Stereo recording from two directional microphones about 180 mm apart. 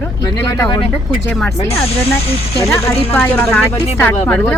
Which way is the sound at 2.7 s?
15° left (ahead or behind).